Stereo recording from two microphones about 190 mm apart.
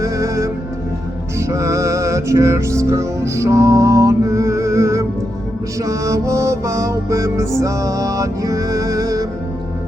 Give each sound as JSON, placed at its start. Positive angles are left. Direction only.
{"t": 0.0, "sound": "music", "side_deg": -15}